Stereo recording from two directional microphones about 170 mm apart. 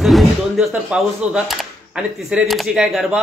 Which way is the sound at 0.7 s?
5° right (ahead or behind).